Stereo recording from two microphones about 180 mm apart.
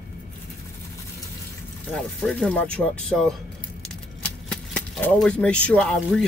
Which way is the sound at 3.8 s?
5° left (ahead or behind).